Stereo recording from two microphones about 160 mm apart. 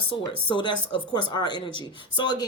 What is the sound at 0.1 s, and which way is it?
Speech, 30° left (ahead or behind).